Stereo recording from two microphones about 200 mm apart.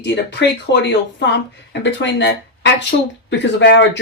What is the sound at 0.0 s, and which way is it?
Speech, 60° left (ahead or behind).